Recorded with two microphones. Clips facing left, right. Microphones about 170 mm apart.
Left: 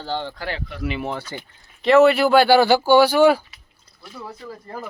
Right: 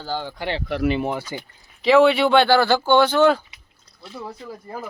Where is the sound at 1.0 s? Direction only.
10° right (ahead or behind).